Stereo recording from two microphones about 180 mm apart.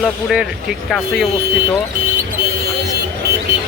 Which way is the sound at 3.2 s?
60° right (ahead or behind).